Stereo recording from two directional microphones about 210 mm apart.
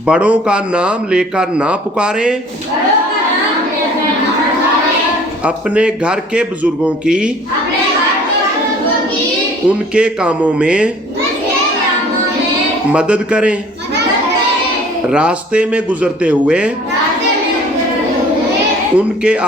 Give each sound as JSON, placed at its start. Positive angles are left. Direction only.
{"t": 0.0, "sound": "a man's voice", "side_deg": -5}
{"t": 5.5, "sound": "a man's voice", "side_deg": -5}
{"t": 9.6, "sound": "a man's voice", "side_deg": -5}
{"t": 12.9, "sound": "a man's voice", "side_deg": -5}
{"t": 15.1, "sound": "a man's voice", "side_deg": -5}
{"t": 18.9, "sound": "a man's voice", "side_deg": -5}